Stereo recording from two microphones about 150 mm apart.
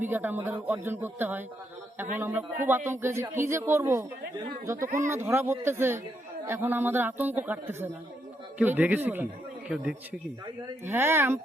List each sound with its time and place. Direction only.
0.0 s a man's voice: 15° right (ahead or behind)